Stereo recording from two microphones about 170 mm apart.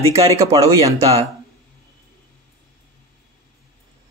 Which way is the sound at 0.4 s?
20° right (ahead or behind).